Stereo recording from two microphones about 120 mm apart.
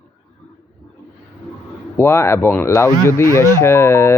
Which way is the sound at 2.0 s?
20° left (ahead or behind).